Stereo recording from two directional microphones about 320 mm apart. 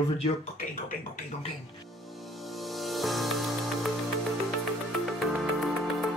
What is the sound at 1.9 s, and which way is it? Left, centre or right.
Music, centre.